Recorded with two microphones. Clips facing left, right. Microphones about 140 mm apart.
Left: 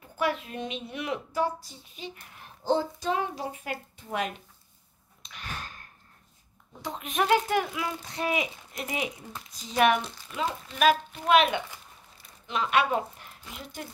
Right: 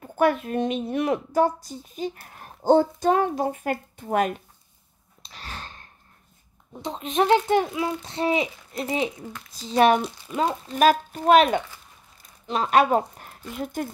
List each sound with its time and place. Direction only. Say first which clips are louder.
0.0 s a woman's voice: right 8 dB; 50° right (ahead or behind)
5.2 s a sound: right 1 dB; 35° right (ahead or behind)
6.7 s a child's voice: right 6 dB; 25° right (ahead or behind); by 13.8 s 50° right (ahead or behind)